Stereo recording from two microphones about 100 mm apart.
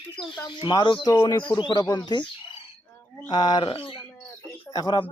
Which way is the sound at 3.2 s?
45° left (ahead or behind).